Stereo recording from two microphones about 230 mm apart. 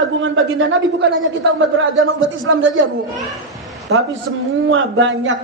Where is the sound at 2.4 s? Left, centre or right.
Right.